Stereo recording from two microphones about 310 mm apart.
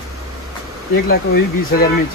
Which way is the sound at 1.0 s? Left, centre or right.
Left.